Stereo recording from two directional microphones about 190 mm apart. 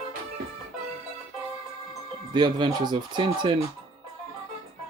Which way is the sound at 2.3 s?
25° right (ahead or behind).